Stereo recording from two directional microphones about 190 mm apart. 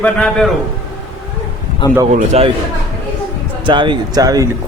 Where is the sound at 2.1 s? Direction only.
35° right (ahead or behind).